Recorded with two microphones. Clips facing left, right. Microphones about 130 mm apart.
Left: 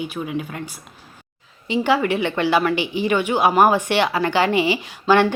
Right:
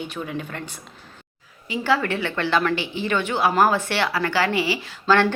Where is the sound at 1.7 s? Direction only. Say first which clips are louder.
Left 4 dB; 15° left (ahead or behind).